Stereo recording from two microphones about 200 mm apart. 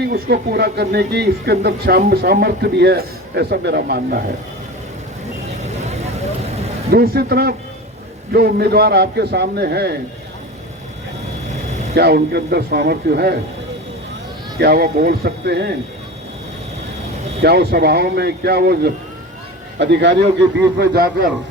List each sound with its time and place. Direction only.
0.1 s speech: 50° right (ahead or behind)
6.9 s speech: 50° right (ahead or behind)
11.9 s speech: 55° right (ahead or behind)
14.6 s speech: 50° right (ahead or behind)
17.4 s a man's voice: 50° right (ahead or behind)
20.7 s speech: 50° right (ahead or behind)